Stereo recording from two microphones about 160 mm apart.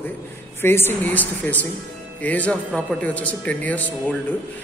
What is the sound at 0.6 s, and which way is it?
A man's voice, 15° left (ahead or behind).